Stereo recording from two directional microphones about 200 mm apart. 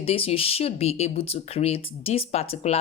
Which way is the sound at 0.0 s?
30° left (ahead or behind).